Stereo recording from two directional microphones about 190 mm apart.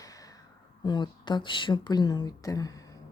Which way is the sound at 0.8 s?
25° left (ahead or behind).